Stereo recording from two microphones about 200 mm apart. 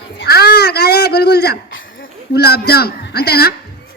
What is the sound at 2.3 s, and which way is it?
Speech, 55° left (ahead or behind).